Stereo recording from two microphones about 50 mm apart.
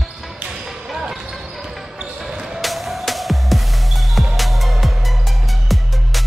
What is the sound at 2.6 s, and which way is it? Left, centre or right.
Music, centre.